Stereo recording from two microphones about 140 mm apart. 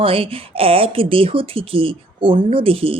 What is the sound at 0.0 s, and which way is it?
Speech, 40° right (ahead or behind).